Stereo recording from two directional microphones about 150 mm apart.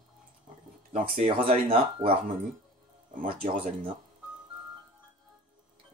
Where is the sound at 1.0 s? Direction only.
40° right (ahead or behind).